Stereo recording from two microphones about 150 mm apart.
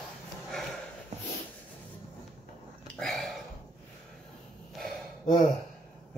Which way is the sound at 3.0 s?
Centre (ahead or behind).